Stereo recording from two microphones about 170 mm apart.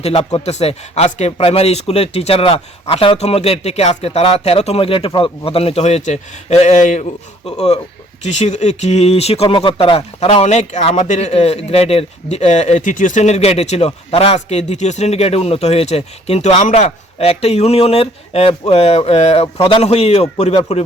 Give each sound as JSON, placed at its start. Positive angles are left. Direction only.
{"t": 0.0, "sound": "speech", "side_deg": 35}